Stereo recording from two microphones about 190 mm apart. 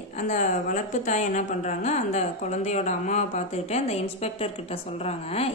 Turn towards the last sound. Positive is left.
turn(degrees=30)  # may be behind; listen again after turning